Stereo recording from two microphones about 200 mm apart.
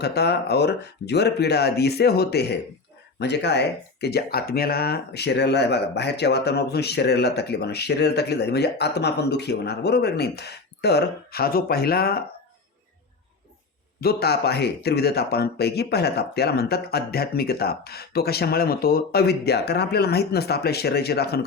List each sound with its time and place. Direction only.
0.0 s speech: 55° left (ahead or behind)
14.0 s speech: 50° left (ahead or behind)